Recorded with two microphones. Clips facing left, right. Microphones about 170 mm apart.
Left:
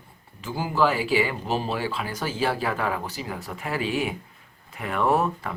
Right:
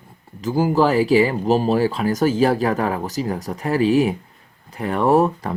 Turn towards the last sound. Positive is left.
turn(degrees=-35)  # may be behind; listen again after turning